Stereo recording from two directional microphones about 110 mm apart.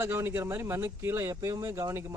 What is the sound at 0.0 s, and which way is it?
Speech, 20° right (ahead or behind).